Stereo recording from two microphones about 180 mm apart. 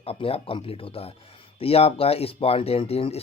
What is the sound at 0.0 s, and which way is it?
Speech, 30° left (ahead or behind).